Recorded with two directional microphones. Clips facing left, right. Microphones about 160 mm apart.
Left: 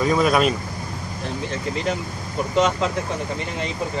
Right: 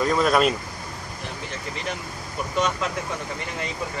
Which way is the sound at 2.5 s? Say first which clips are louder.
Left 5 dB; 25° left (ahead or behind).